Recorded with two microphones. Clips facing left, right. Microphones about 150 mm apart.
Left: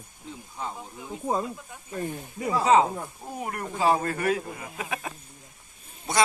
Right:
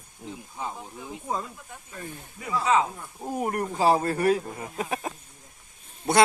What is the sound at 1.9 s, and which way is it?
Speech, 40° left (ahead or behind).